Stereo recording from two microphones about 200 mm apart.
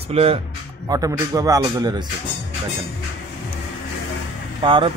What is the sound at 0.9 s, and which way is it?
A man's voice, 15° right (ahead or behind).